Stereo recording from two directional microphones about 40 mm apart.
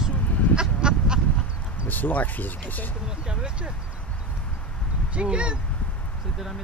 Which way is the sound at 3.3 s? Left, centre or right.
Right.